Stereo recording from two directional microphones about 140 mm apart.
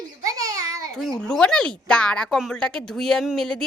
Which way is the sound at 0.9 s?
Centre (ahead or behind).